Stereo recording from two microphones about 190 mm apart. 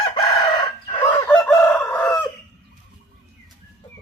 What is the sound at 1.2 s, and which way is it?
Crowing, 5° left (ahead or behind).